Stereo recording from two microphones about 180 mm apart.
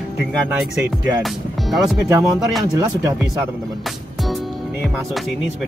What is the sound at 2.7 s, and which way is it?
Speech, 20° right (ahead or behind).